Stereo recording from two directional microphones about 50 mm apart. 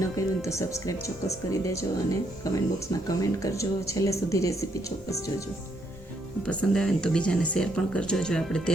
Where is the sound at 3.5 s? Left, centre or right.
Left.